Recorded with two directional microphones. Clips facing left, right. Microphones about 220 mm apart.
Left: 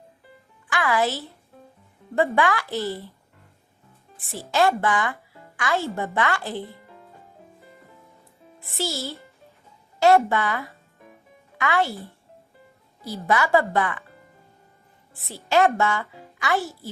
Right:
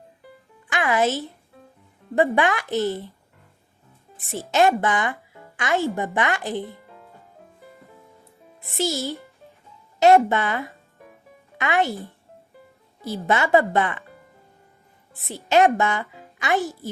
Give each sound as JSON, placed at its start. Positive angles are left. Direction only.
{"t": 0.7, "sound": "speech", "side_deg": -20}
{"t": 4.3, "sound": "speech", "side_deg": -20}
{"t": 8.6, "sound": "speech", "side_deg": -15}
{"t": 13.1, "sound": "speech", "side_deg": -20}
{"t": 15.3, "sound": "speech", "side_deg": -15}